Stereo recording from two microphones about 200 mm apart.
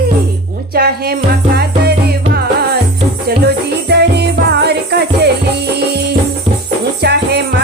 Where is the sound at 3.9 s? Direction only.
55° right (ahead or behind).